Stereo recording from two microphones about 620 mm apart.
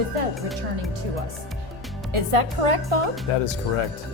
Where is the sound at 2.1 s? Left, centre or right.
Right.